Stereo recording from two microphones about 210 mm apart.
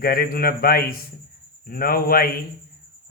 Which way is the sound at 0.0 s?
45° left (ahead or behind).